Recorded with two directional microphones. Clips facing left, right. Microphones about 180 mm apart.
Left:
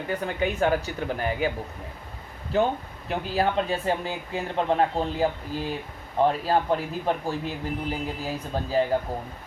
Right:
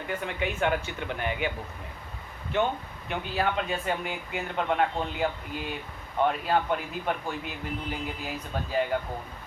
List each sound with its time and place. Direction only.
0.1 s a man's voice: 35° left (ahead or behind)
2.5 s a man's voice: 35° left (ahead or behind)